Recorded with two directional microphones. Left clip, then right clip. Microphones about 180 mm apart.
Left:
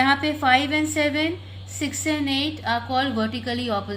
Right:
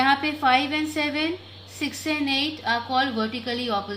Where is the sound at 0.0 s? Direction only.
25° left (ahead or behind).